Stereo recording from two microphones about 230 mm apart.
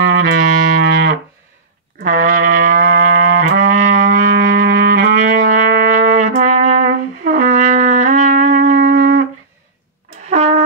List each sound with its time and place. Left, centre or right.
0.0 s music: right
10.3 s music: right